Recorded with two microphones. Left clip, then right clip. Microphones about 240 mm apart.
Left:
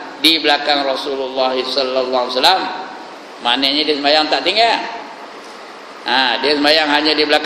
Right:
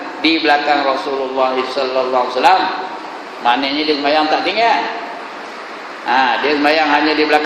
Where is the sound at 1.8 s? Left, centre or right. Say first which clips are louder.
Right 1 dB; left.